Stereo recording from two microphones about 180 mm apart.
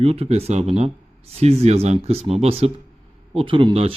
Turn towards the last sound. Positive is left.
turn(degrees=-30)  # may be behind; listen again after turning